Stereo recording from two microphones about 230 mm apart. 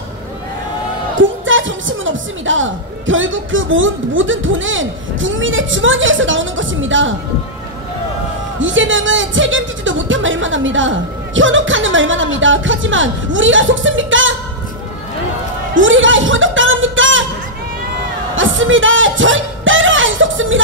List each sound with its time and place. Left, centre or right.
1.1 s a woman's voice: right
8.5 s a woman's voice: right
15.7 s a sound: right
18.3 s music: right